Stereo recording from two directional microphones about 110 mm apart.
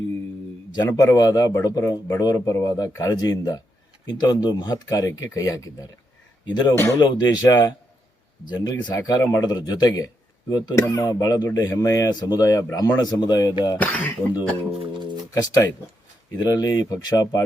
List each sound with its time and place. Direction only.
0.7 s a man's voice: 40° left (ahead or behind)
13.7 s speech: 15° left (ahead or behind)
14.8 s music: 45° right (ahead or behind)
15.3 s a man's voice: 35° left (ahead or behind)